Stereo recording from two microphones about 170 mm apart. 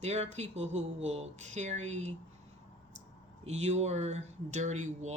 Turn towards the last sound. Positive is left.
turn(degrees=-45)  # may be behind; listen again after turning